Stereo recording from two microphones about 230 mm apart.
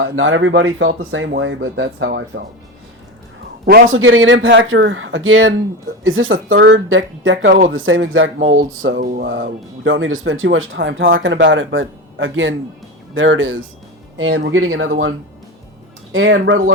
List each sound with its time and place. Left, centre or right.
0.0 s speech: right
3.7 s a man's voice: right
3.9 s speech: right
9.0 s speech: right
16.1 s speech: right